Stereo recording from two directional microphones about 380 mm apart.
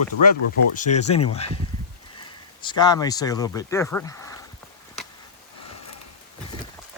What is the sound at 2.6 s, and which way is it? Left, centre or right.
Speech, centre.